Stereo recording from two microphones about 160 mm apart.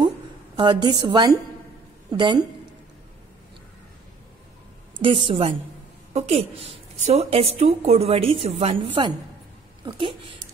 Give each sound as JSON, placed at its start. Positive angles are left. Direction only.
{"t": 0.6, "sound": "a woman's voice", "side_deg": -30}
{"t": 5.0, "sound": "a woman's voice", "side_deg": -35}